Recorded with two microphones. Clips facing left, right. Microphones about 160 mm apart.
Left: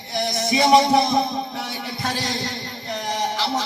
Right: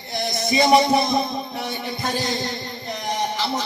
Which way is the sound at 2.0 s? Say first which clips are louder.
Right 1 dB; 80° left.